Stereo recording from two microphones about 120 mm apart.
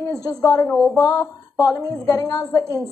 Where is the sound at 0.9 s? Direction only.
30° left (ahead or behind).